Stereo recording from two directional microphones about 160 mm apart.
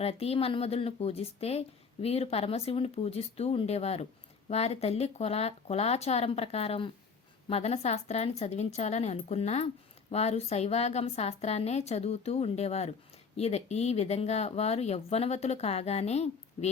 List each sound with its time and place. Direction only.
0.0 s a woman's voice: 40° left (ahead or behind)